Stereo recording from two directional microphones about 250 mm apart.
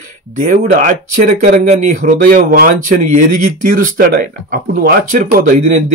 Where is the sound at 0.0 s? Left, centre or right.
Right.